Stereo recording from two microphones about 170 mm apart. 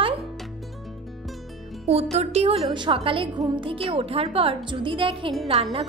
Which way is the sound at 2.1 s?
35° right (ahead or behind).